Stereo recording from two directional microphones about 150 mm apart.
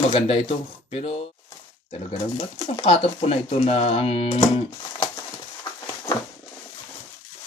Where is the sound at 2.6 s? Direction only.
35° left (ahead or behind).